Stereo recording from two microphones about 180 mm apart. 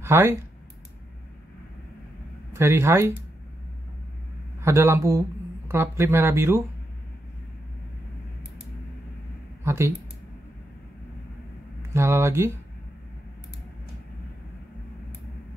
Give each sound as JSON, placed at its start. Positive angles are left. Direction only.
{"t": 0.0, "sound": "speech", "side_deg": -15}
{"t": 2.5, "sound": "speech", "side_deg": -15}
{"t": 4.6, "sound": "speech", "side_deg": -15}
{"t": 9.6, "sound": "a sound", "side_deg": -15}
{"t": 11.9, "sound": "speech", "side_deg": -15}